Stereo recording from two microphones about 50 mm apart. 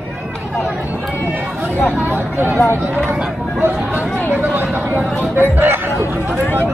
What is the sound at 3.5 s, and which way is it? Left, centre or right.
Speech, right.